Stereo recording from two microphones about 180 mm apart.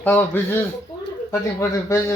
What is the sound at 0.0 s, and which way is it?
Speech, 10° left (ahead or behind).